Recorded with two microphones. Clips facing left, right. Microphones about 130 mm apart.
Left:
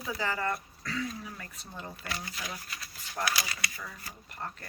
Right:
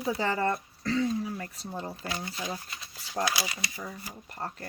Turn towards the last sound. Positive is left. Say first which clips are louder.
# right 3 dB
turn(degrees=-30)  # may be behind; listen again after turning